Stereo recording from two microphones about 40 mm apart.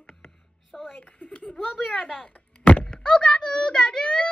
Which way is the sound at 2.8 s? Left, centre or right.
Left.